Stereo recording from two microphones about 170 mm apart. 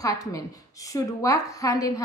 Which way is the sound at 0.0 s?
20° left (ahead or behind).